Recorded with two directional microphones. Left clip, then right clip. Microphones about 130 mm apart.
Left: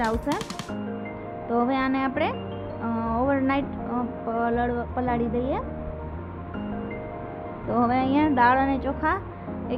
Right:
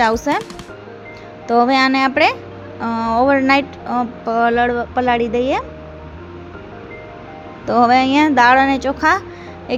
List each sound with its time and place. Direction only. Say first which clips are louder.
0.0 s speech: right 11 dB; 55° right (ahead or behind)
1.5 s speech: right 11 dB; 45° right (ahead or behind)
7.7 s speech: right 11 dB; 50° right (ahead or behind)